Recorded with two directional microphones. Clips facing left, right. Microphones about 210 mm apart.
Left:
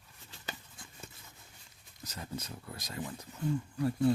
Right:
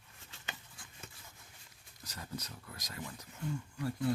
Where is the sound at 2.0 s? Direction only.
25° left (ahead or behind).